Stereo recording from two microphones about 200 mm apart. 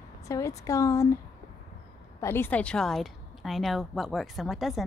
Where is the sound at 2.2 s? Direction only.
10° left (ahead or behind).